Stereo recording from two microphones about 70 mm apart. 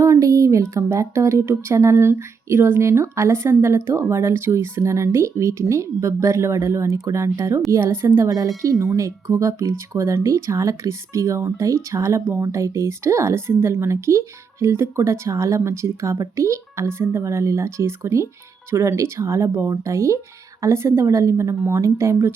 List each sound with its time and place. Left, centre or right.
0.0 s speech: right